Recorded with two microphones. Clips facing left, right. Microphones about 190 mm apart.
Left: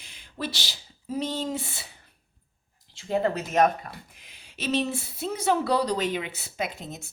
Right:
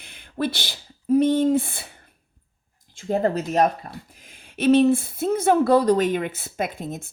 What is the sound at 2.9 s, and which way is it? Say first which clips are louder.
Speech: right 4 dB; 45° right (ahead or behind).